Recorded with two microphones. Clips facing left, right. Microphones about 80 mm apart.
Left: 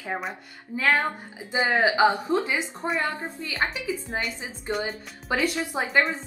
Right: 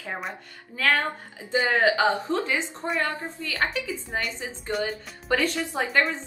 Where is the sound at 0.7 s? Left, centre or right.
Centre.